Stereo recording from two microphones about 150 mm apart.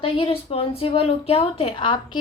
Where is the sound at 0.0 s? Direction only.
40° left (ahead or behind).